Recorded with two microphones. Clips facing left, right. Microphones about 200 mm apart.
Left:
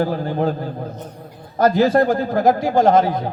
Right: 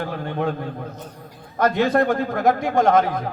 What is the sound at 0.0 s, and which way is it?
Speech, 35° left (ahead or behind).